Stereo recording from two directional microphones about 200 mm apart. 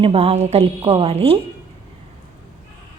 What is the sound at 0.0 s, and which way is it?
Speech, 30° right (ahead or behind).